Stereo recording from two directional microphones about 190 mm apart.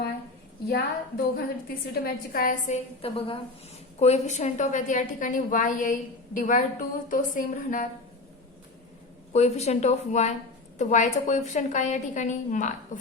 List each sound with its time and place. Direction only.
0.7 s a woman's voice: 60° left (ahead or behind); by 7.9 s 45° left (ahead or behind)
9.3 s a woman's voice: 35° left (ahead or behind)